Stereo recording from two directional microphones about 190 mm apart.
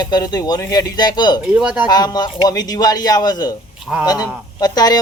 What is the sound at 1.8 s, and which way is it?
Speech, 20° left (ahead or behind).